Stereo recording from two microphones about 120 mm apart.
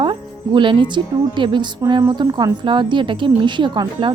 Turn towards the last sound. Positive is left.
turn(degrees=-40)  # may be behind; listen again after turning